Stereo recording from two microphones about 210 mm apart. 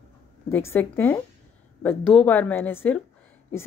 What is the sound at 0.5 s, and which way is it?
A woman's voice, 10° left (ahead or behind).